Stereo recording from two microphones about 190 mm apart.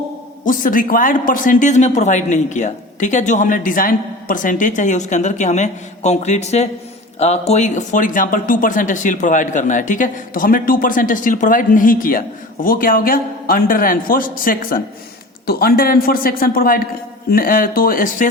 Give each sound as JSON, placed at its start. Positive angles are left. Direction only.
{"t": 0.4, "sound": "speech", "side_deg": 45}